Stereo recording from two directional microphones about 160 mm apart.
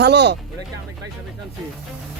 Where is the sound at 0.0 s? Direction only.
90° right.